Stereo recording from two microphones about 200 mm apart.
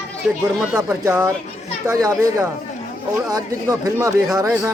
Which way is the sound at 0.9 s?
10° right (ahead or behind).